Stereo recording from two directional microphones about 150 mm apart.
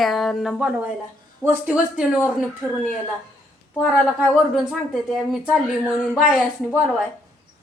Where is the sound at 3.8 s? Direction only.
Centre (ahead or behind).